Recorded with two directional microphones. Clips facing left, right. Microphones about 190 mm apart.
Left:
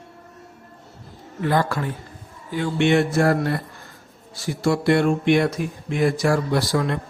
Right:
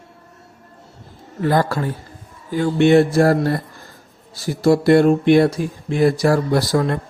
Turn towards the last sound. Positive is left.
turn(degrees=-40)  # may be behind; listen again after turning